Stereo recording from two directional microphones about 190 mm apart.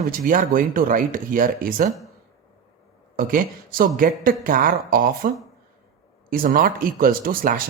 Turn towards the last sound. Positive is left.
turn(degrees=-50)  # may be behind; listen again after turning